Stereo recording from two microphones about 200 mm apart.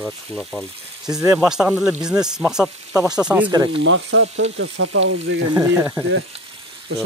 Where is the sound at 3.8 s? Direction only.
70° right (ahead or behind).